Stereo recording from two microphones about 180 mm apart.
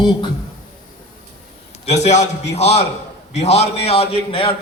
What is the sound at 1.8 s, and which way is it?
A man's voice, 40° left (ahead or behind).